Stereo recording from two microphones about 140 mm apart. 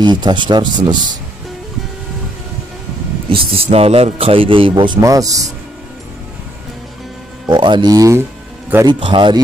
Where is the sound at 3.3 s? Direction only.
45° right (ahead or behind); by 5.5 s 25° right (ahead or behind).